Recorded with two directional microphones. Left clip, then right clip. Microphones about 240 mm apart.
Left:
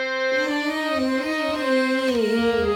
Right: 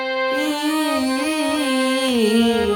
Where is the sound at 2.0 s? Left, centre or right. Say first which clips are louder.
Right 3 dB; right.